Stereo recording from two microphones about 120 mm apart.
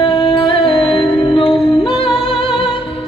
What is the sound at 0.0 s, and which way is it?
Music, 45° left (ahead or behind).